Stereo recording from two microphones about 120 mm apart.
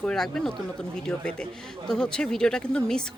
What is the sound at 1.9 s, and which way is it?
A woman's voice, 5° left (ahead or behind).